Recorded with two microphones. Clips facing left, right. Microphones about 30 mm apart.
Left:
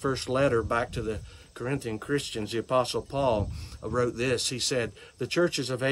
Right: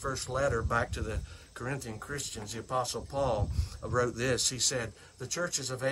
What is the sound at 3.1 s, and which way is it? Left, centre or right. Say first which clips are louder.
Speech: left 3 dB; left.